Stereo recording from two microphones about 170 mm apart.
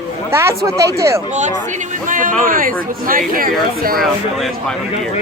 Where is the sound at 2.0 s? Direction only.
50° right (ahead or behind).